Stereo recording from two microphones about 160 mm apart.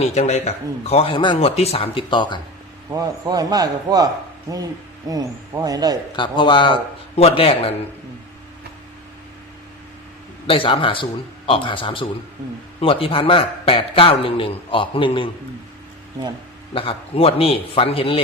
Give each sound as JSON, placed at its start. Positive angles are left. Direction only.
{"t": 0.0, "sound": "a man's voice", "side_deg": 45}
{"t": 2.9, "sound": "a man's voice", "side_deg": -25}
{"t": 6.1, "sound": "a man's voice", "side_deg": 30}
{"t": 10.4, "sound": "a man's voice", "side_deg": 35}
{"t": 16.7, "sound": "a man's voice", "side_deg": 35}